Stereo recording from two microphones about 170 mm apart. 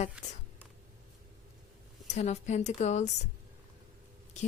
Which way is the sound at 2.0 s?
45° left (ahead or behind).